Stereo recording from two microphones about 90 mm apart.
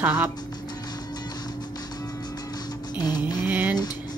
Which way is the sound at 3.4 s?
20° right (ahead or behind).